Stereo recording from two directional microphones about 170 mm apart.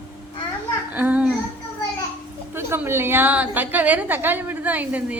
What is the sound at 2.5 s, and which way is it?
A woman's voice, 15° right (ahead or behind).